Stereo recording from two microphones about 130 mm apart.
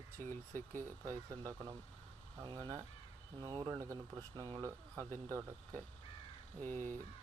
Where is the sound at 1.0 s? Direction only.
25° right (ahead or behind).